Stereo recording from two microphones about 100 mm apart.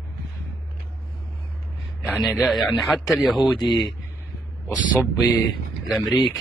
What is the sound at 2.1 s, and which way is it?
Speech, centre (ahead or behind).